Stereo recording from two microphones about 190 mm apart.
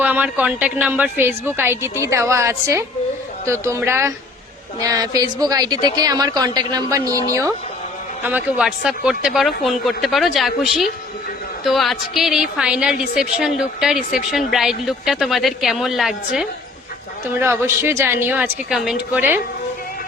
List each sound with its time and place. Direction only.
0.0 s a woman's voice: 10° right (ahead or behind)
17.4 s a woman's voice: 10° right (ahead or behind)